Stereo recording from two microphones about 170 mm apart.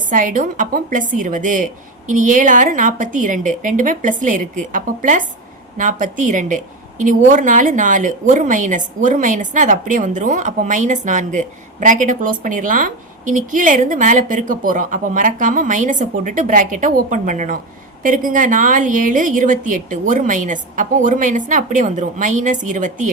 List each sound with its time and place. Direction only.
0.1 s a woman's voice: 50° right (ahead or behind)